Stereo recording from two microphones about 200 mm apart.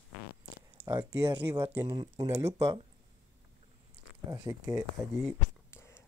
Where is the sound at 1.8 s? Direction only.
20° right (ahead or behind).